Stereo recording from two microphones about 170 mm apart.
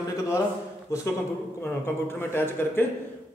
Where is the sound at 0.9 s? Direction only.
20° left (ahead or behind).